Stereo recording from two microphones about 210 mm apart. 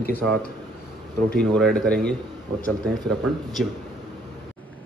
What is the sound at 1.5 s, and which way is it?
Speech, 5° left (ahead or behind).